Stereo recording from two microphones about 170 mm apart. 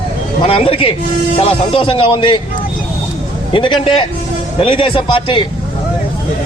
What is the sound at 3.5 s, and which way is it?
A man's voice, 30° left (ahead or behind).